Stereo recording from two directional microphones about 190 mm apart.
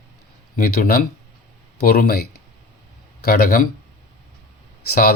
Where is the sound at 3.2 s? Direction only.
50° left (ahead or behind).